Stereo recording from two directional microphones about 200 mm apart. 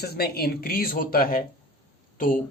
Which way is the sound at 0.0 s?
50° left (ahead or behind).